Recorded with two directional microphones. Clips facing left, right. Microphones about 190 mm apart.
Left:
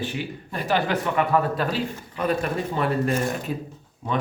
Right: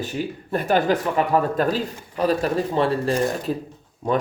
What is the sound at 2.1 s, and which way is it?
Speech, 35° right (ahead or behind).